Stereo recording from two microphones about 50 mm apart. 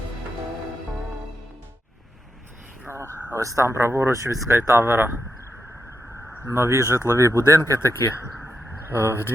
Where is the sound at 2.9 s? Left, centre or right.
Right.